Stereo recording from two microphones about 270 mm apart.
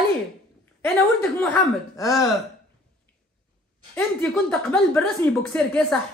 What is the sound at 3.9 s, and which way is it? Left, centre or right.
Speech, centre.